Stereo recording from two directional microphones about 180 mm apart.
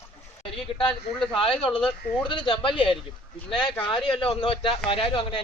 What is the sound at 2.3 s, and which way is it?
A man's voice, 25° left (ahead or behind).